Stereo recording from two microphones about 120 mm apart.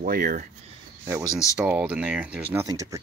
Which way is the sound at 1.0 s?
25° right (ahead or behind).